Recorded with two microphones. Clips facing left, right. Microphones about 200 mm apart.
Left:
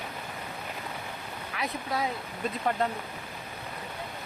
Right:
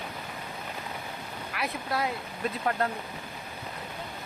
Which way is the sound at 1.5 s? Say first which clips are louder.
Even; centre (ahead or behind).